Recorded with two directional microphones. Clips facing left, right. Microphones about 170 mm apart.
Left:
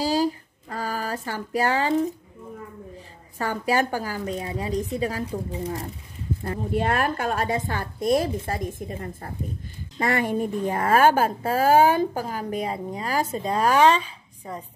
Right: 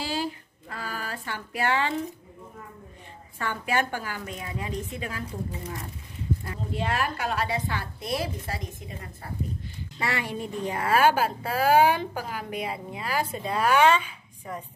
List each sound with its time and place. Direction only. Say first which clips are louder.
0.0 s a sound: left 8 dB; 40° left (ahead or behind)
3.3 s a woman's voice: left 4 dB; 35° left (ahead or behind)
6.4 s a woman's voice: left 6 dB; 50° left (ahead or behind); by 14.6 s 35° left (ahead or behind)